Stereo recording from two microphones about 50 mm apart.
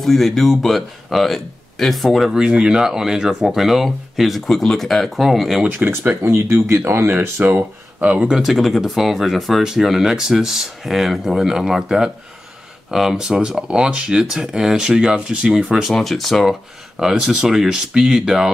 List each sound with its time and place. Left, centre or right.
0.0 s speech: centre
2.3 s speech: centre
5.8 s speech: right
6.2 s speech: right
6.7 s speech: right
8.0 s speech: right
8.3 s speech: centre
14.5 s speech: centre
15.9 s speech: centre
16.9 s speech: centre